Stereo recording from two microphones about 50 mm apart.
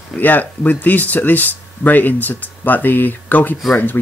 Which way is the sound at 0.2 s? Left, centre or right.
Left.